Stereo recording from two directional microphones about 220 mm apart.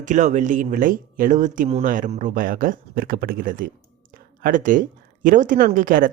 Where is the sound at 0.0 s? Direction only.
35° right (ahead or behind).